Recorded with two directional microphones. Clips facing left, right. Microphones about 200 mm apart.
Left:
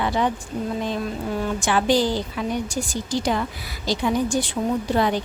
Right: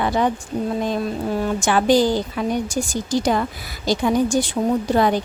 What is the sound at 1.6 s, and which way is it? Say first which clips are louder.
A woman's voice: right 4 dB; 45° right (ahead or behind).